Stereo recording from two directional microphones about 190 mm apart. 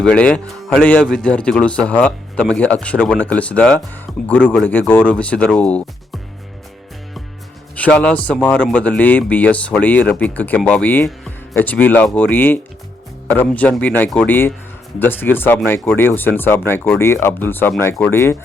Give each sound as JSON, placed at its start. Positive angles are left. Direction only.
{"t": 0.0, "sound": "a man's voice", "side_deg": 5}
{"t": 7.8, "sound": "speech", "side_deg": 5}